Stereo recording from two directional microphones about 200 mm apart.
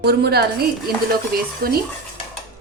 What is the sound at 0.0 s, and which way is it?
A woman's voice, 55° right (ahead or behind).